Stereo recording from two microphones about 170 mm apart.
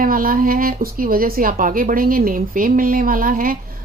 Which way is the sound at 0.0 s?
55° right (ahead or behind).